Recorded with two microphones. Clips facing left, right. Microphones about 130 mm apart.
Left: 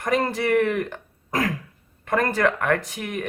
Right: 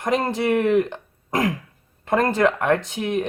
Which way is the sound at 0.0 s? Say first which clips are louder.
Right 1 dB; 20° right (ahead or behind).